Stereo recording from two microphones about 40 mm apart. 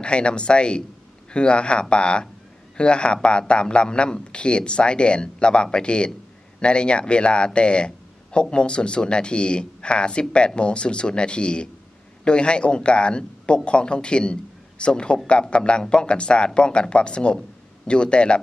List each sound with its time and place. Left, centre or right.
0.0 s a man's voice: left